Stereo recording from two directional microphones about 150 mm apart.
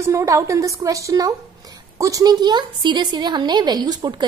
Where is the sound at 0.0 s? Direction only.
20° right (ahead or behind).